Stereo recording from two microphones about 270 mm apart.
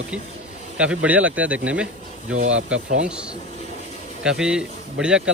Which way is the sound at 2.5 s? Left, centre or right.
Right.